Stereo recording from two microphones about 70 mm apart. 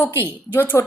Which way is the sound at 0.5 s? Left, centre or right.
Left.